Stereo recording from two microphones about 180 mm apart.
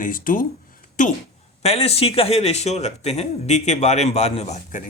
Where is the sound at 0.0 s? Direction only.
50° left (ahead or behind).